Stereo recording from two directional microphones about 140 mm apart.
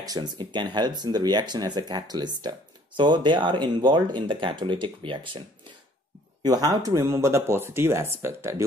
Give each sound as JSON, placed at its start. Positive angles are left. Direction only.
{"t": 0.0, "sound": "speech", "side_deg": -30}
{"t": 6.4, "sound": "speech", "side_deg": -30}